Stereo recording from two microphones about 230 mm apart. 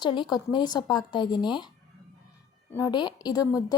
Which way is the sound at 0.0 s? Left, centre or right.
Centre.